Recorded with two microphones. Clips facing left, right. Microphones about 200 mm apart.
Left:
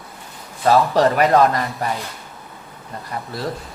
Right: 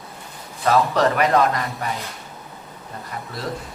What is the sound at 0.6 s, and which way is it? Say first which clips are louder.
Speech: left 3 dB; 30° left (ahead or behind).